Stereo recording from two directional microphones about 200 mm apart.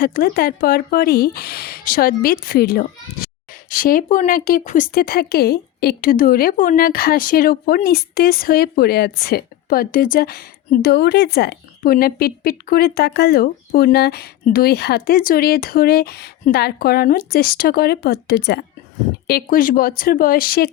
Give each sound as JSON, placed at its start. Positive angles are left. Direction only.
{"t": 0.0, "sound": "speech", "side_deg": 45}